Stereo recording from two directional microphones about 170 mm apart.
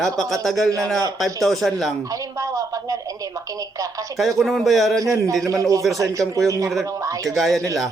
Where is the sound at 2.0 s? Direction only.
20° right (ahead or behind).